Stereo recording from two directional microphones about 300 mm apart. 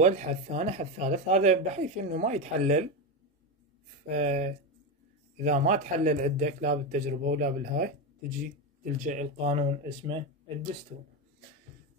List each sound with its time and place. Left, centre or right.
0.0 s speech: right
4.1 s speech: right
9.0 s speech: right